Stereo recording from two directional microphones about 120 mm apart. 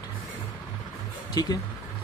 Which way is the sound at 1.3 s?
30° left (ahead or behind).